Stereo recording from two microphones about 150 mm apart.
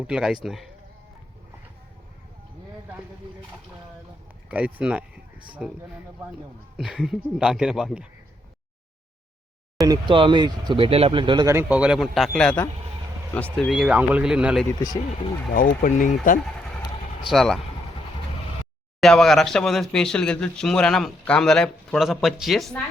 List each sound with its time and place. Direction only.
0.1 s speech: 5° right (ahead or behind)
4.4 s speech: 10° right (ahead or behind)
9.8 s speech: 30° right (ahead or behind)
11.5 s speech: 10° right (ahead or behind); by 13.7 s 10° left (ahead or behind)
13.7 s speech: 5° right (ahead or behind)
15.5 s speech: 65° left (ahead or behind)
17.2 s speech: centre (ahead or behind)
18.9 s speech: 5° left (ahead or behind)